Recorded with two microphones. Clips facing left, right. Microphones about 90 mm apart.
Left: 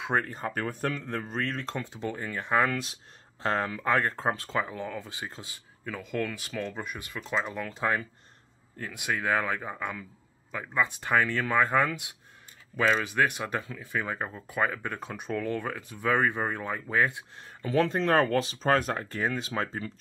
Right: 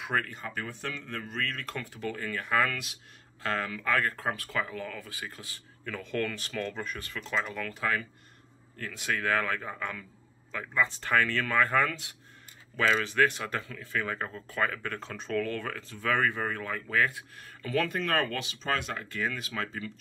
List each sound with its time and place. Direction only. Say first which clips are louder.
0.0 s speech: left 3 dB; 25° left (ahead or behind)
0.5 s speech: left 6 dB; 50° left (ahead or behind); by 5.9 s 20° left (ahead or behind)
5.9 s speech: even; 5° left (ahead or behind); by 19.9 s 35° left (ahead or behind)